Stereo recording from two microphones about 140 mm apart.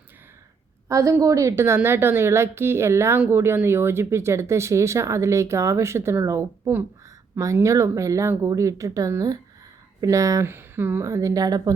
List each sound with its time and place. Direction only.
0.9 s a woman's voice: 25° right (ahead or behind)